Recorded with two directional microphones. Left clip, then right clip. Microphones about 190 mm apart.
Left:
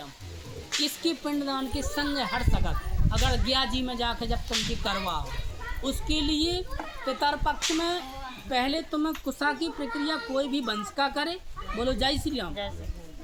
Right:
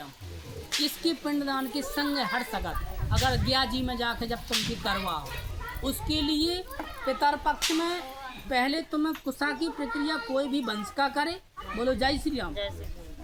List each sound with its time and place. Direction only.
0.8 s a woman's voice: 20° left (ahead or behind)
11.8 s speech: 50° left (ahead or behind)